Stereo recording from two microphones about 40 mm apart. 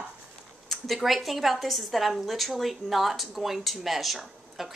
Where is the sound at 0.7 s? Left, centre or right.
Centre.